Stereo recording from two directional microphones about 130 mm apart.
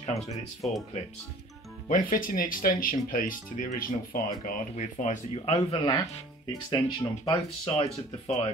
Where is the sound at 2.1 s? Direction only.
90° left.